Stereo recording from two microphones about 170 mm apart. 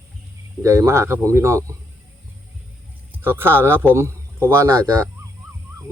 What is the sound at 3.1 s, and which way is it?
A man's voice, 15° right (ahead or behind).